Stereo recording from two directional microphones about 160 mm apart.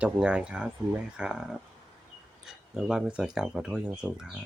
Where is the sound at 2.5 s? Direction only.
5° right (ahead or behind).